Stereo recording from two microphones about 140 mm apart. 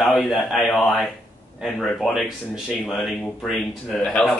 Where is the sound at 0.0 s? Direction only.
Centre (ahead or behind).